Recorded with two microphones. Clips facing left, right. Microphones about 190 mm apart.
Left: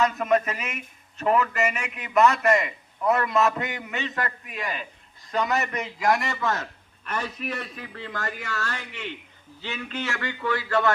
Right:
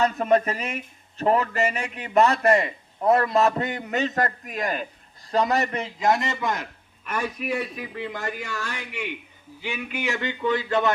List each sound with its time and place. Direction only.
0.0 s a man's voice: 35° right (ahead or behind)